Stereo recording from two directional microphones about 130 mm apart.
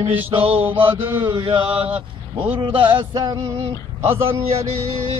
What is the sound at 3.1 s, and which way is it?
Male singing, 30° right (ahead or behind).